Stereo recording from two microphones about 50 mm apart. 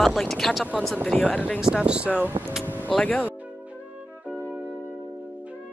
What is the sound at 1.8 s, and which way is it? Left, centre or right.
Speech, right.